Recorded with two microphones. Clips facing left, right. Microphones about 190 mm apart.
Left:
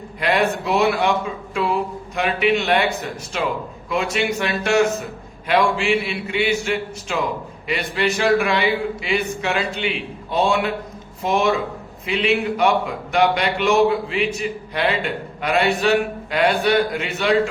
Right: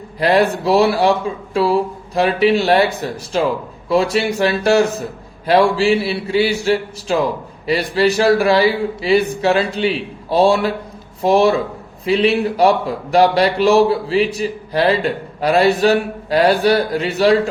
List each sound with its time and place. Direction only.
0.2 s a man's voice: 35° right (ahead or behind)